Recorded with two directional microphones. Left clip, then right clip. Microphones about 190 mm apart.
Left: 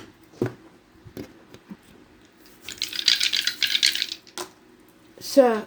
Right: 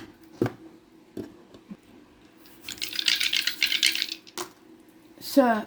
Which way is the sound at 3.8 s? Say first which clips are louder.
Left 2 dB; 5° right (ahead or behind).